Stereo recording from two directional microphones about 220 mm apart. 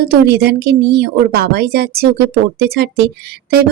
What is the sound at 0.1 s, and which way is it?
Speech, 45° right (ahead or behind).